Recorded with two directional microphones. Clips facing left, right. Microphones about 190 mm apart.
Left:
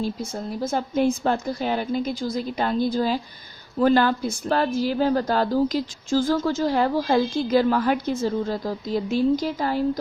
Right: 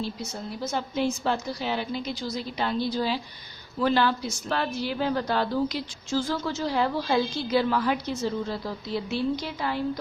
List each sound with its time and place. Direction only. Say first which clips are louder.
0.0 s a woman's voice: left 5 dB; 50° left (ahead or behind)